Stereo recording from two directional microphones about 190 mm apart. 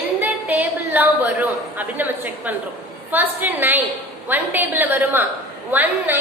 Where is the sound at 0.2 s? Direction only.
10° right (ahead or behind).